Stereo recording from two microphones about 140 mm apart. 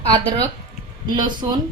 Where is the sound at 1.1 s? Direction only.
30° right (ahead or behind).